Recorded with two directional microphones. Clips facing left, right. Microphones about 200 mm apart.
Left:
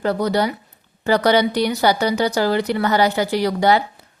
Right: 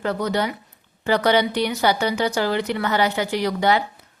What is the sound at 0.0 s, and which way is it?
A woman's voice, 35° left (ahead or behind).